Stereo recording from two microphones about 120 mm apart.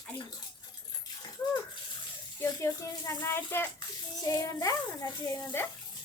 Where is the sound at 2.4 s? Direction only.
25° left (ahead or behind).